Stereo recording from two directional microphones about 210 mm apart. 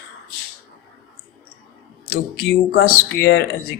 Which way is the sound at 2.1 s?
50° left (ahead or behind).